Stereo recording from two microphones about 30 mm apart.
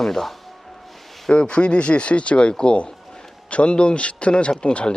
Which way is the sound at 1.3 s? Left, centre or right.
Left.